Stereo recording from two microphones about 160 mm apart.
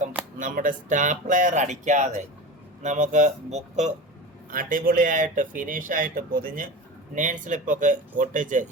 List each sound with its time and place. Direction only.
0.3 s speech: 55° right (ahead or behind)
4.5 s speech: 60° right (ahead or behind)